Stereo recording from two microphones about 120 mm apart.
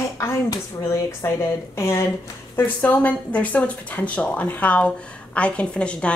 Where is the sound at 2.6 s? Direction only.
15° left (ahead or behind).